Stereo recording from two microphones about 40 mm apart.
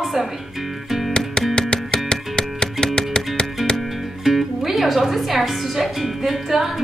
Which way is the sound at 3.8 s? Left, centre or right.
Centre.